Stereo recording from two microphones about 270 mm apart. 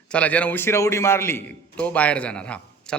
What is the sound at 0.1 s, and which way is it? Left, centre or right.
A man's voice, centre.